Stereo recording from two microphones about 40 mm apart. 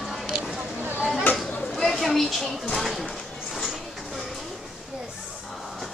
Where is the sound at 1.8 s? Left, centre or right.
Centre.